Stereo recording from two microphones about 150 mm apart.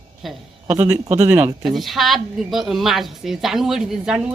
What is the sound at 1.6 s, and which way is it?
A woman's voice, centre (ahead or behind).